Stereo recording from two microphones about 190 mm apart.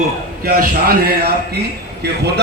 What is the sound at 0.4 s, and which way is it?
A man's voice, 50° right (ahead or behind).